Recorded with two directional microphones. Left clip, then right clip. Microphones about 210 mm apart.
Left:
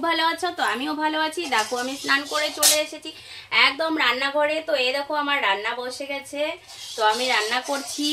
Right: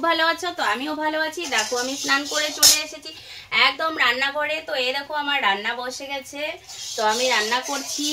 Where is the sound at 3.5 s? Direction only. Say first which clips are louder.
Even; 20° left (ahead or behind).